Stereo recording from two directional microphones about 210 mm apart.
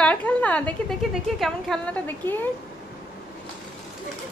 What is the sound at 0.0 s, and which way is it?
A woman's voice, 5° left (ahead or behind).